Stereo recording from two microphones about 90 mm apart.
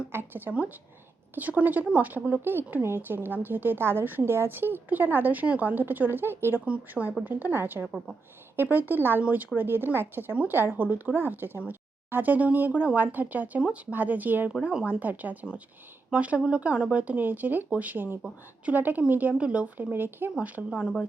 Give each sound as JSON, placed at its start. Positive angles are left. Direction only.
{"t": 0.1, "sound": "a woman's voice", "side_deg": -25}
{"t": 14.5, "sound": "a woman's voice", "side_deg": -5}
{"t": 20.6, "sound": "speech", "side_deg": 0}